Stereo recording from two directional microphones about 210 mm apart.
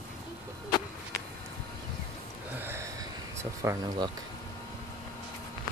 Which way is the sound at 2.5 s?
10° right (ahead or behind).